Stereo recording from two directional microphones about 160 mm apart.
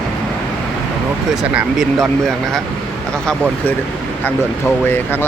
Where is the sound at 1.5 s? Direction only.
Centre (ahead or behind).